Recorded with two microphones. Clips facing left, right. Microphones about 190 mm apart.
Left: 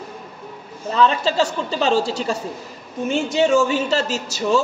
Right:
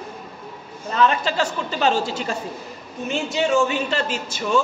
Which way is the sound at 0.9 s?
30° left (ahead or behind).